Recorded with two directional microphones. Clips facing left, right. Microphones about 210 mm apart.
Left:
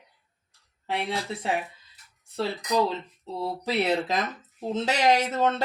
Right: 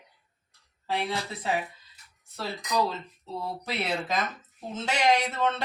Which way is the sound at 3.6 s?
35° left (ahead or behind).